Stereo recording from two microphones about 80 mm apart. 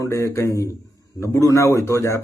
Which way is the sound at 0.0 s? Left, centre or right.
Left.